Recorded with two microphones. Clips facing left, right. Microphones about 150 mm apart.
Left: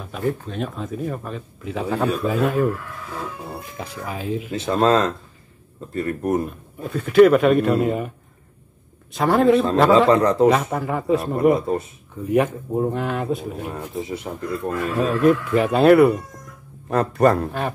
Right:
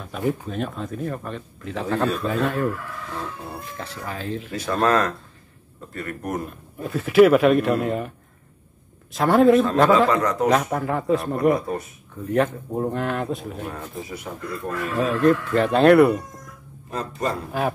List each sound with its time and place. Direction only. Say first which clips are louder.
0.0 s speech: even; centre (ahead or behind)
3.7 s speech: left 2 dB; 10° left (ahead or behind)
4.5 s speech: left 3 dB; 20° left (ahead or behind)
6.8 s speech: left 2 dB; centre (ahead or behind)
9.1 s speech: right 1 dB; centre (ahead or behind)
10.0 s a man's voice: left 5 dB; 30° left (ahead or behind)
10.5 s speech: even; centre (ahead or behind)
11.5 s speech: left 3 dB; 25° left (ahead or behind)
12.2 s speech: left 2 dB; 10° left (ahead or behind)
14.0 s speech: left 4 dB; 25° left (ahead or behind)
15.0 s speech: left 1 dB; 5° left (ahead or behind)
16.9 s speech: left 9 dB; 60° left (ahead or behind)
17.5 s speech: right 1 dB; 5° right (ahead or behind)